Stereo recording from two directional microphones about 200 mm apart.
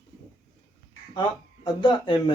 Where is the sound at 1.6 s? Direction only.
25° left (ahead or behind).